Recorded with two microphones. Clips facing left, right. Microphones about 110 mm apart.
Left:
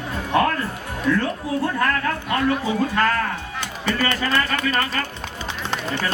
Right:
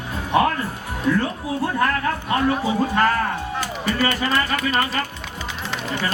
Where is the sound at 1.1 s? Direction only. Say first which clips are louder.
Even; 15° right (ahead or behind).